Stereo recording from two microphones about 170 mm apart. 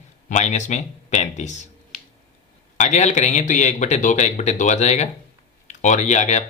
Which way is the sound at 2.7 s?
45° left (ahead or behind).